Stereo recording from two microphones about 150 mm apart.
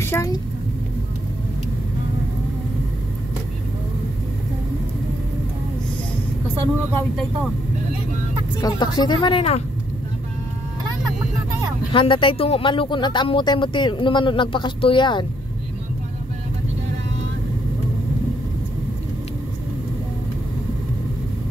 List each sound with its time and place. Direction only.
0.0 s a sound: 15° left (ahead or behind)
8.5 s speech: 25° left (ahead or behind)
11.9 s speech: 35° left (ahead or behind)